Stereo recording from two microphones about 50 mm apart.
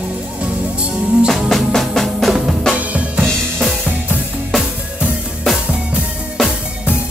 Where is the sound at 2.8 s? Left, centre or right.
Right.